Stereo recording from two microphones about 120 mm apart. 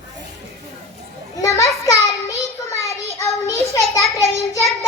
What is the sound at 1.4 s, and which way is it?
Children playing, 25° left (ahead or behind).